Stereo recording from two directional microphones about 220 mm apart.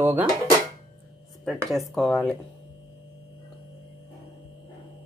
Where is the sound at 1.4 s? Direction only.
Centre (ahead or behind).